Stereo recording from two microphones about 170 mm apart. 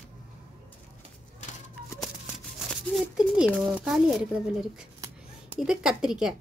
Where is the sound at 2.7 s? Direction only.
5° right (ahead or behind).